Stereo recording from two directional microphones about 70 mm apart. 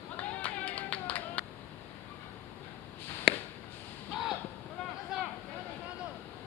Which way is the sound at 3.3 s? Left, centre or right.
Centre.